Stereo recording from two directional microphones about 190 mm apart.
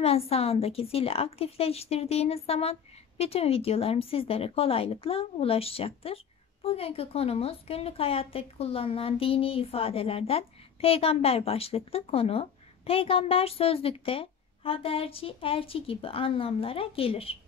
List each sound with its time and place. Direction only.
0.0 s a woman's voice: 30° left (ahead or behind)